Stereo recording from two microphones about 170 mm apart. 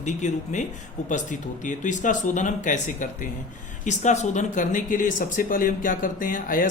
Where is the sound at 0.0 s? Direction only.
45° left (ahead or behind).